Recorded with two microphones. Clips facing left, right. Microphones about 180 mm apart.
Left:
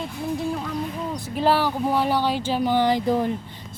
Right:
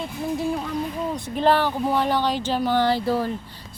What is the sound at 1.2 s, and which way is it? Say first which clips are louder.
A woman's voice: right 1 dB; 5° left (ahead or behind).